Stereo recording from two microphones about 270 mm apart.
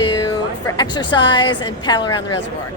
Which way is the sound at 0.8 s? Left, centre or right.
Centre.